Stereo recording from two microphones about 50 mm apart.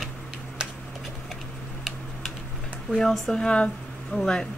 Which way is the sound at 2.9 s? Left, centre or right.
Centre.